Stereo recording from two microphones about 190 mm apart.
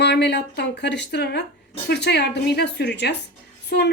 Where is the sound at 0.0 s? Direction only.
60° left (ahead or behind).